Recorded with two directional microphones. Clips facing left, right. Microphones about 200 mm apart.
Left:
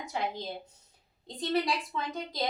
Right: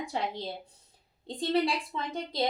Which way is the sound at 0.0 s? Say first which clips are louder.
Right 1 dB; 30° right (ahead or behind).